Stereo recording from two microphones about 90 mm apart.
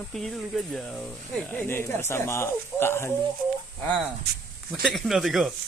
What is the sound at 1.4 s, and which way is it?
Speech, 20° left (ahead or behind).